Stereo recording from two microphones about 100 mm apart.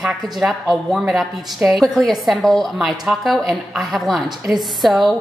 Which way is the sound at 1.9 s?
Centre (ahead or behind).